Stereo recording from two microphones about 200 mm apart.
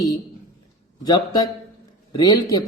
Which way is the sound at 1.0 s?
20° left (ahead or behind).